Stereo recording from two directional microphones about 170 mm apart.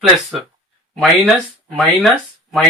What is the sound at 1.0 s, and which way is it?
Speech, centre (ahead or behind).